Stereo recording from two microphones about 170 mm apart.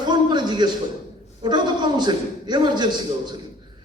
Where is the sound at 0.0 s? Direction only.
25° right (ahead or behind).